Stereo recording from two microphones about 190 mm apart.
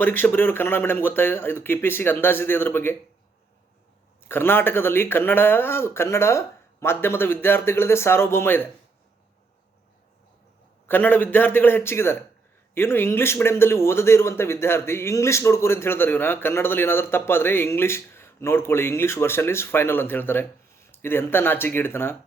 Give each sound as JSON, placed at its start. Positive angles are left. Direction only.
{"t": 0.0, "sound": "speech", "side_deg": 10}
{"t": 4.2, "sound": "speech", "side_deg": 10}
{"t": 10.8, "sound": "speech", "side_deg": 10}